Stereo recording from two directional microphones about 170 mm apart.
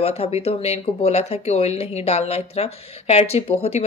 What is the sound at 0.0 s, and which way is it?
Speech, 35° left (ahead or behind).